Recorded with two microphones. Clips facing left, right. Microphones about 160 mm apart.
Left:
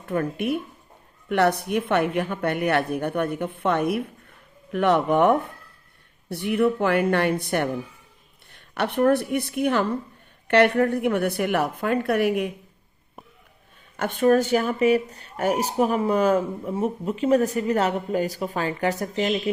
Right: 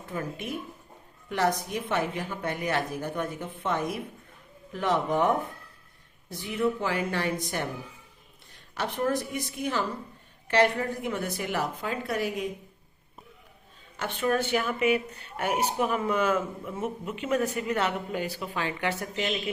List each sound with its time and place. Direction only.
0.0 s a woman's voice: 60° left (ahead or behind)
13.9 s speech: 50° left (ahead or behind)